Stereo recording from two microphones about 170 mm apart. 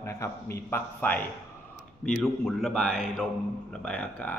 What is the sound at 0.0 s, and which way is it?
A man's voice, 15° left (ahead or behind).